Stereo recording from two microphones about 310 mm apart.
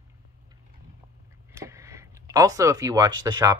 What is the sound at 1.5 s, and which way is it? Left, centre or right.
Speech, centre.